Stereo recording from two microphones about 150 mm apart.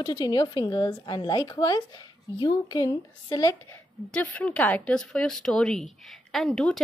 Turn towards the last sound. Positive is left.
turn(degrees=5)  # may be behind; listen again after turning